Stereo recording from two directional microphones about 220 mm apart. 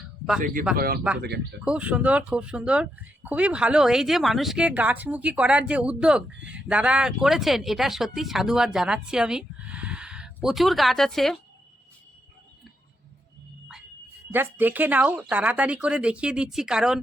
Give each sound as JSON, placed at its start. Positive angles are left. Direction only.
{"t": 0.7, "sound": "speech", "side_deg": -5}
{"t": 1.2, "sound": "speech", "side_deg": -50}
{"t": 1.6, "sound": "speech", "side_deg": -5}
{"t": 14.3, "sound": "speech", "side_deg": -10}